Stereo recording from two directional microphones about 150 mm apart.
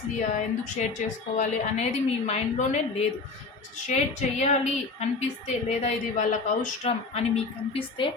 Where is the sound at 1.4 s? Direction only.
50° left (ahead or behind).